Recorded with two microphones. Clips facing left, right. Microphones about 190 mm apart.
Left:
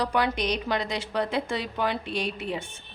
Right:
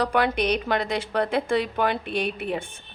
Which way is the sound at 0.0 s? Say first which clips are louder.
Right 3 dB; 60° right (ahead or behind).